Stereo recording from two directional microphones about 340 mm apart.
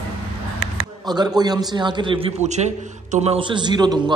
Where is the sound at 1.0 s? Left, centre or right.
Centre.